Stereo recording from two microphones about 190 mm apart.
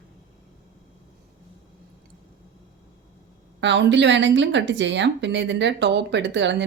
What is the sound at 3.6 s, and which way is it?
A woman's voice, 70° right (ahead or behind).